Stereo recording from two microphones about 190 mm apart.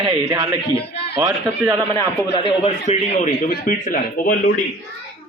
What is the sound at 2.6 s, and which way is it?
Speech, 35° left (ahead or behind).